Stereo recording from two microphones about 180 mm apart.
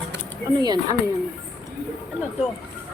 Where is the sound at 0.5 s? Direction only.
20° right (ahead or behind).